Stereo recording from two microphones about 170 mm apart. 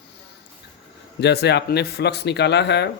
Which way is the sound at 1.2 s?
80° left.